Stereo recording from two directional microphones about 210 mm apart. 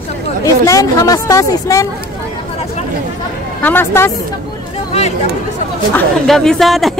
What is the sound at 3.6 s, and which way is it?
Speech, 10° left (ahead or behind).